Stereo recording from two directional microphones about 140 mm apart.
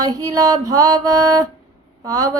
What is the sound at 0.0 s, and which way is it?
Female singing, 25° right (ahead or behind).